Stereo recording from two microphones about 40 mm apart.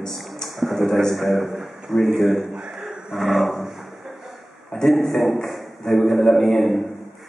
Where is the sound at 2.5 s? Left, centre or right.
Centre.